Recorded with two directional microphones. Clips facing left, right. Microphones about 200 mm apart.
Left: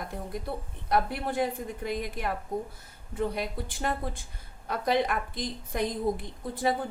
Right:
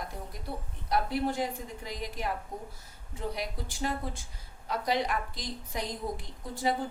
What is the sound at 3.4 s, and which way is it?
A woman's voice, 55° left (ahead or behind).